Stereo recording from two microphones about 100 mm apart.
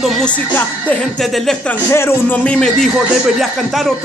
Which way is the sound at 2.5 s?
5° left (ahead or behind).